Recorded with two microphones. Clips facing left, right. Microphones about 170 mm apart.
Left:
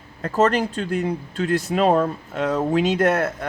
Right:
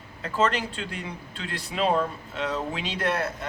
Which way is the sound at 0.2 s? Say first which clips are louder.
Left 6 dB; 45° left (ahead or behind).